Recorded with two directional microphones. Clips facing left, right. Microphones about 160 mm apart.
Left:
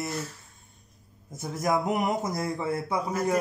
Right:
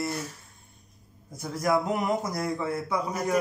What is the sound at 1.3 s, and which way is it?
A man's voice, 20° left (ahead or behind).